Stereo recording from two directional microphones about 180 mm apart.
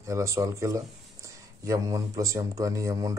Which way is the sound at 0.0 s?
15° right (ahead or behind).